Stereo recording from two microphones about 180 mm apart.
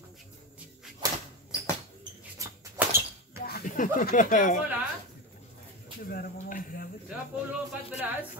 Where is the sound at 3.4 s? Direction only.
55° left (ahead or behind).